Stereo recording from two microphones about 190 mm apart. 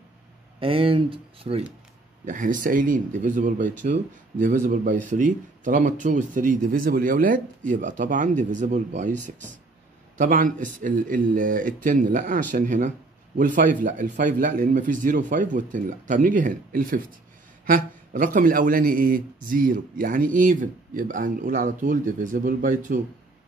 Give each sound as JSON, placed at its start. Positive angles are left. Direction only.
{"t": 0.6, "sound": "speech", "side_deg": -30}
{"t": 2.2, "sound": "speech", "side_deg": -45}